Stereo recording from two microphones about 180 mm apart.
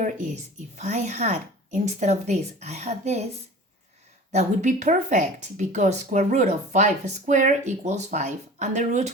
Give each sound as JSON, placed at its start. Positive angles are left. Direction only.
{"t": 0.8, "sound": "speech", "side_deg": -40}
{"t": 4.3, "sound": "speech", "side_deg": -40}